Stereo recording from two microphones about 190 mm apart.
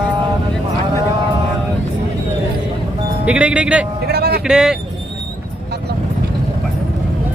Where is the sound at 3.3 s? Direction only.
5° right (ahead or behind).